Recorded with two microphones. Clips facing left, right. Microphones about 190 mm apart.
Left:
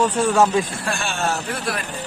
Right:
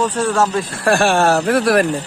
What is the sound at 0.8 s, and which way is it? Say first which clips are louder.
Speech: right 11 dB; 65° right (ahead or behind).